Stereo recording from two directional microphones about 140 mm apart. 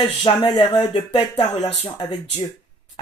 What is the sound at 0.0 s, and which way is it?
Speech, 35° left (ahead or behind).